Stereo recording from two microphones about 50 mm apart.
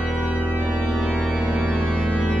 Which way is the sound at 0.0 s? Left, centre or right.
Right.